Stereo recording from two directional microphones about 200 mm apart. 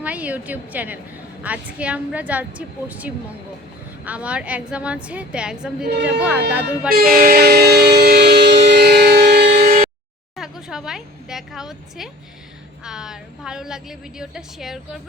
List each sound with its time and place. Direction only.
0.0 s a woman's voice: 5° right (ahead or behind)
5.8 s a woman's voice: 55° right (ahead or behind)
6.1 s a woman's voice: 5° right (ahead or behind)
6.9 s train: 45° right (ahead or behind)
10.3 s a woman's voice: centre (ahead or behind)